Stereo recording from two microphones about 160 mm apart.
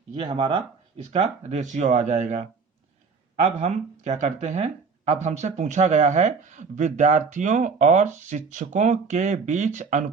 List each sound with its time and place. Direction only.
0.2 s speech: 35° right (ahead or behind)
3.4 s speech: 45° right (ahead or behind)